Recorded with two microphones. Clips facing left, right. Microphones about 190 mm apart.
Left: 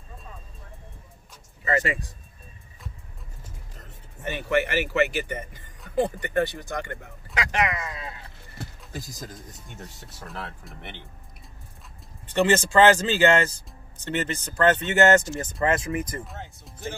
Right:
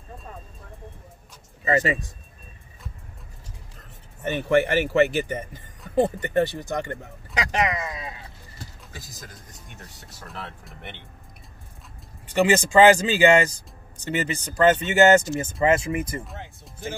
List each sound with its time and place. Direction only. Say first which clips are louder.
1.6 s speech: right 3 dB; 25° right (ahead or behind)
4.5 s speech: right 4 dB; 30° right (ahead or behind); by 8.2 s 15° right (ahead or behind)
10.2 s speech: left 1 dB; centre (ahead or behind)
12.3 s speech: right 1 dB; 10° right (ahead or behind)